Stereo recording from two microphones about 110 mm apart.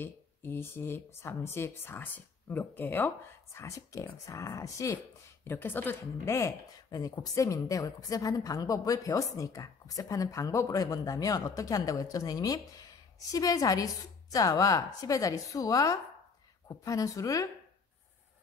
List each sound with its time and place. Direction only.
0.0 s speech: 20° left (ahead or behind)
3.5 s speech: 30° left (ahead or behind)
5.4 s speech: 20° left (ahead or behind)